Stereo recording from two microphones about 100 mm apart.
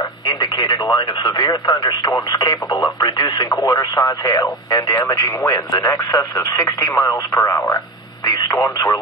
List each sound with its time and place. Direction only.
0.4 s speech: 45° left (ahead or behind)
3.4 s speech: 35° left (ahead or behind)
5.0 s speech: 30° left (ahead or behind)